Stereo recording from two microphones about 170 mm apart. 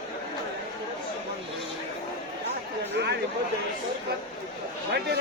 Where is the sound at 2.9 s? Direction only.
80° right.